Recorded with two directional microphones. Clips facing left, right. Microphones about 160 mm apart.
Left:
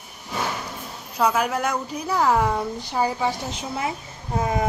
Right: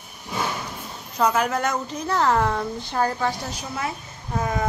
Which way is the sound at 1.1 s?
5° left (ahead or behind).